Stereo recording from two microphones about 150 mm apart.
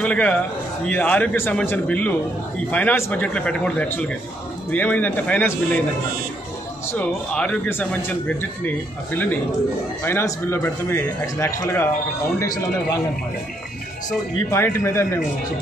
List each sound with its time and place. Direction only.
0.0 s speech: 10° left (ahead or behind)
6.9 s speech: 10° left (ahead or behind)
14.5 s speech: 20° left (ahead or behind)